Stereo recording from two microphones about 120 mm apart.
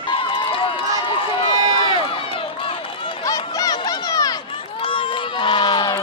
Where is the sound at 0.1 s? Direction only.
45° left (ahead or behind).